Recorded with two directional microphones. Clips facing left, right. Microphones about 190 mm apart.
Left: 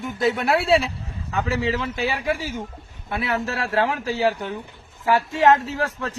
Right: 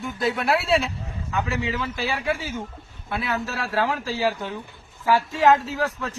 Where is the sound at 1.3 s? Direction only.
35° left (ahead or behind).